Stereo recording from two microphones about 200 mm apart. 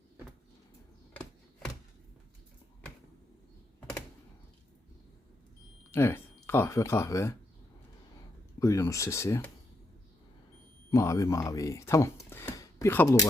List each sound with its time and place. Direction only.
1.1 s a sound: 10° left (ahead or behind)
5.9 s speech: 10° left (ahead or behind)
8.5 s speech: 15° left (ahead or behind)
10.9 s speech: 15° left (ahead or behind)